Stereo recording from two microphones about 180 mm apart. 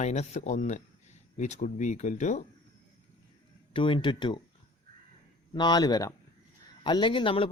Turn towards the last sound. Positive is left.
turn(degrees=30)  # may be behind; listen again after turning